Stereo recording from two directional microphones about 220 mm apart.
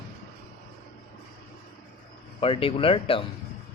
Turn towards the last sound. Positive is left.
turn(degrees=25)  # may be behind; listen again after turning